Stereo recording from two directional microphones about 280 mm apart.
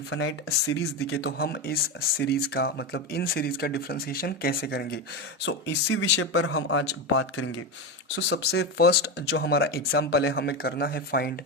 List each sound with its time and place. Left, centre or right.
0.1 s speech: left